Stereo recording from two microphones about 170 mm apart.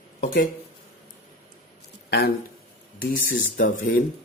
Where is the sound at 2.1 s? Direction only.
70° left (ahead or behind).